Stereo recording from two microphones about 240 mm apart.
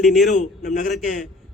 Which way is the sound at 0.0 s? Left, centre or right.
Centre.